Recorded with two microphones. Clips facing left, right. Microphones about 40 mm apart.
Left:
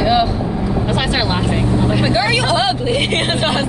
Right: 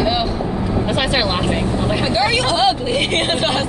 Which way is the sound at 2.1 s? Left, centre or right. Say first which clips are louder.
Right 2 dB; centre.